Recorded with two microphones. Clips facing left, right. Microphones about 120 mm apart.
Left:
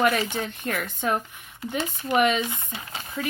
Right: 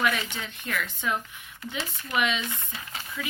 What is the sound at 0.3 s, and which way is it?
Speech, 50° left (ahead or behind).